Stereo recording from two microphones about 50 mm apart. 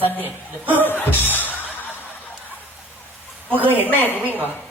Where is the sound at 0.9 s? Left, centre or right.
Left.